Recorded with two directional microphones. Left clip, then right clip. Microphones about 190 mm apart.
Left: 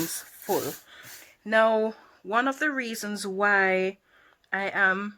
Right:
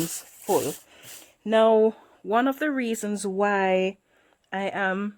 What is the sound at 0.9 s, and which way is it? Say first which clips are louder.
Speech: left 1 dB; 50° right (ahead or behind).